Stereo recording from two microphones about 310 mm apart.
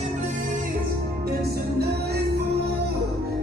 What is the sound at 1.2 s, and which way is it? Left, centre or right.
Music, right.